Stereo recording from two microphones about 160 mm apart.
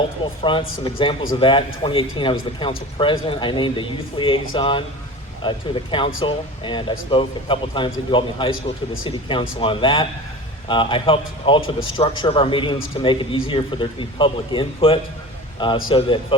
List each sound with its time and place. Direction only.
0.5 s a man's voice: 30° left (ahead or behind)